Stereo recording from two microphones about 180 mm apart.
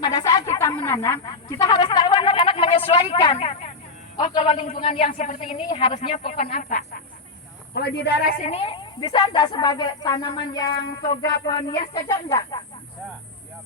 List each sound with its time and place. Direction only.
0.0 s a sound: 20° left (ahead or behind)
1.3 s a woman's voice: 25° left (ahead or behind); by 7.0 s 45° left (ahead or behind)
7.7 s a woman's voice: 65° left (ahead or behind)
8.4 s a woman's voice: 35° left (ahead or behind)